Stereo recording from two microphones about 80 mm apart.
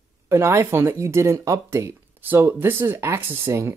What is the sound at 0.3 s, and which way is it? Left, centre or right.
Speech, right.